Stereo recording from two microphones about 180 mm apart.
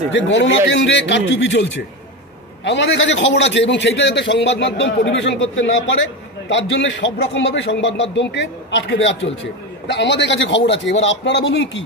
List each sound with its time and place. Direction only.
0.1 s a man's voice: 90° left